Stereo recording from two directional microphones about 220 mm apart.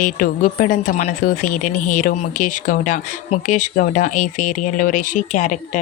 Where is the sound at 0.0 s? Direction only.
35° left (ahead or behind).